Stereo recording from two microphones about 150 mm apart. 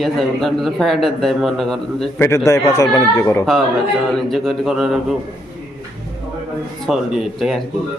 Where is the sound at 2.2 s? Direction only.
20° left (ahead or behind).